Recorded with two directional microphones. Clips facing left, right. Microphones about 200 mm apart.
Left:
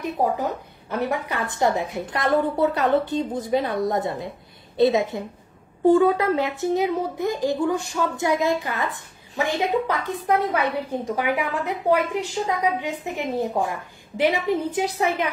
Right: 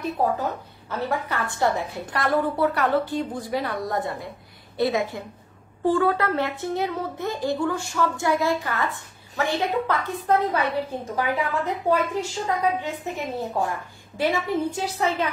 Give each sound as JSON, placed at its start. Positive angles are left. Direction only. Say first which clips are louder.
{"t": 0.0, "sound": "a woman's voice", "louder": "left 1 dB", "side_deg": 15}